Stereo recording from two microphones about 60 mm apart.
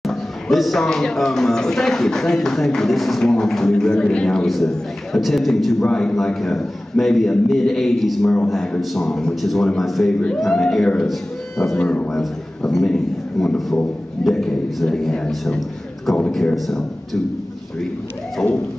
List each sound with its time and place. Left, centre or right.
0.0 s a sound: centre
0.8 s speech: centre
4.5 s a man's voice: centre
6.1 s a man's voice: centre
11.8 s speech: left
12.1 s a man's voice: centre
18.4 s speech: centre